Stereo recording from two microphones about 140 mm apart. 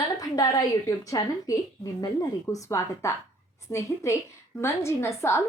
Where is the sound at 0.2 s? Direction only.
25° left (ahead or behind).